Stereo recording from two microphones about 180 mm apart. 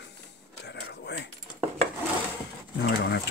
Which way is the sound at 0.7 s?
70° left (ahead or behind).